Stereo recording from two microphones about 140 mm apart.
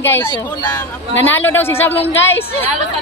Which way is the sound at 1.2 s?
15° left (ahead or behind).